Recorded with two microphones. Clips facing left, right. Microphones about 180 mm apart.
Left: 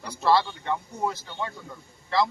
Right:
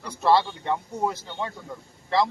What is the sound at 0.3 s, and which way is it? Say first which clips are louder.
Speech: right 2 dB; 20° right (ahead or behind).